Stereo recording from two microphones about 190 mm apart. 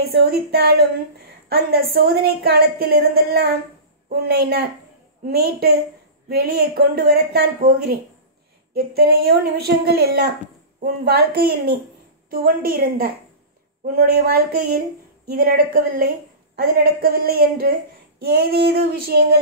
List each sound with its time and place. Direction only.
0.0 s a woman's voice: 55° right (ahead or behind)